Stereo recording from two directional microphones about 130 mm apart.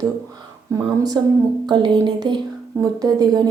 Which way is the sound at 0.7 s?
30° right (ahead or behind).